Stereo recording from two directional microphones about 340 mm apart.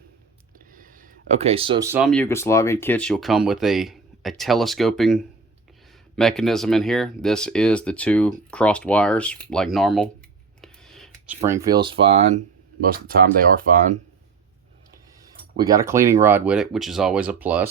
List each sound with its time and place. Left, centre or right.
0.6 s speech: right; by 10.1 s centre
10.6 s a sound: centre
11.3 s speech: centre
12.8 s speech: right
15.5 s speech: centre